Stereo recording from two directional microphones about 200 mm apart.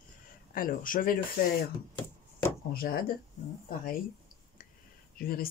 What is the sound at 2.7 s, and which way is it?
Speech, 50° left (ahead or behind).